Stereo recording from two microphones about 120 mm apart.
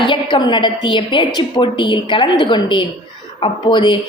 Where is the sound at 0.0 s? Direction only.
45° left (ahead or behind).